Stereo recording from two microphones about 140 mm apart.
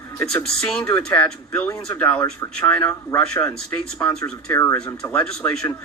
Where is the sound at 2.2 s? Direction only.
25° left (ahead or behind).